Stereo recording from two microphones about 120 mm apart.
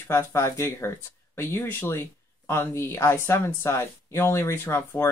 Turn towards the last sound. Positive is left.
turn(degrees=20)  # may be behind; listen again after turning